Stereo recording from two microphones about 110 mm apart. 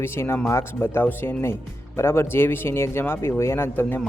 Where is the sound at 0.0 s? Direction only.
20° left (ahead or behind).